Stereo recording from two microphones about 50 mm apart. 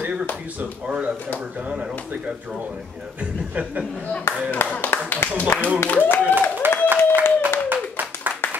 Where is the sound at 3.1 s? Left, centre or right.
Right.